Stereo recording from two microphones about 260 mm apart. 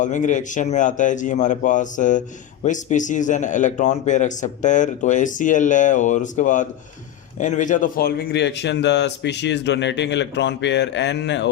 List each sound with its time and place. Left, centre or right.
0.0 s a man's voice: left